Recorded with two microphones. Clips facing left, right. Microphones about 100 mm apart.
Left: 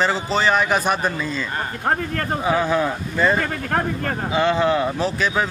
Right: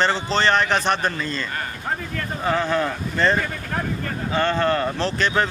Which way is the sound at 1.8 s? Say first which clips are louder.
Left 6 dB; 55° left (ahead or behind).